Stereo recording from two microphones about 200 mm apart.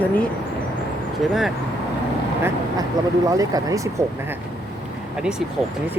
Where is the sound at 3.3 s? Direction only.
15° right (ahead or behind).